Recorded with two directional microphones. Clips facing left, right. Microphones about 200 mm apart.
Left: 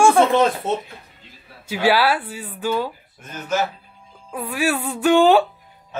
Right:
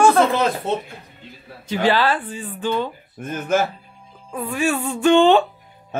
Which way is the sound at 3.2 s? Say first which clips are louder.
Right 14 dB; 50° right (ahead or behind).